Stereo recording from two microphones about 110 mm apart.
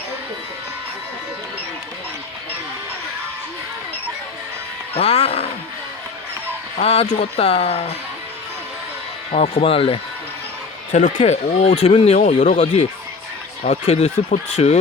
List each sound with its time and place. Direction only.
4.9 s speech: 70° left (ahead or behind)
6.8 s speech: 65° left (ahead or behind)
9.4 s speech: 60° left (ahead or behind)
10.9 s speech: 90° left
12.0 s speech: 85° left
14.5 s speech: 80° left